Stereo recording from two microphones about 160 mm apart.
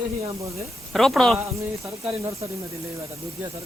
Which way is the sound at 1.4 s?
20° right (ahead or behind).